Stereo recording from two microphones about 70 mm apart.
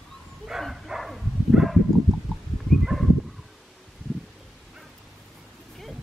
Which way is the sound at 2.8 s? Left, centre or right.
Centre.